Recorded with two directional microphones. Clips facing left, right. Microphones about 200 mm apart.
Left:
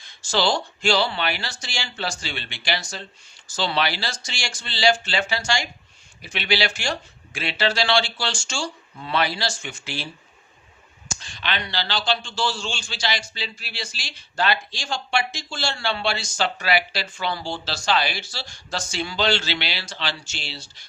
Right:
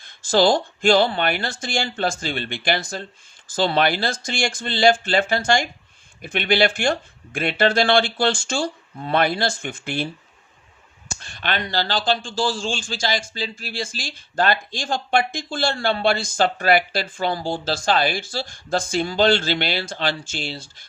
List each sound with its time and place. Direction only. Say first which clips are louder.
0.0 s a man's voice: right 6 dB; 50° right (ahead or behind)
11.2 s a man's voice: right 4 dB; 55° right (ahead or behind)